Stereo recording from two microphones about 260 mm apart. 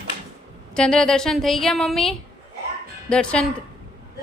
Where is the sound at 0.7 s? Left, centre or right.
Centre.